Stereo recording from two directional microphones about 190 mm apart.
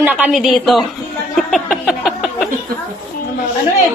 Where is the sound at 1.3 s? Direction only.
Centre (ahead or behind).